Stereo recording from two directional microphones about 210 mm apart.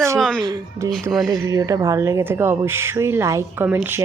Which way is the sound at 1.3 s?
15° right (ahead or behind).